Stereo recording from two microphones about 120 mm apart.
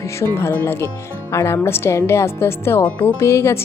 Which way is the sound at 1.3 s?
25° left (ahead or behind).